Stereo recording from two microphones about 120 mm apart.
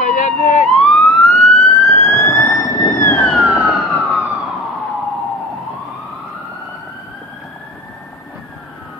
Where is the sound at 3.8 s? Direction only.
5° left (ahead or behind).